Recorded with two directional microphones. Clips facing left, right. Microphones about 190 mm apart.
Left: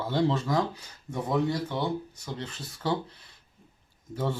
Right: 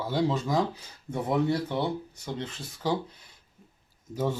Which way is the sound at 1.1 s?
25° right (ahead or behind).